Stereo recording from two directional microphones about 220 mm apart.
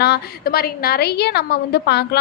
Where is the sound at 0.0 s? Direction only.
45° left (ahead or behind).